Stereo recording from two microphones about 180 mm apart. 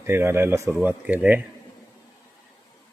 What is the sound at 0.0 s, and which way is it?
Speech, 15° right (ahead or behind).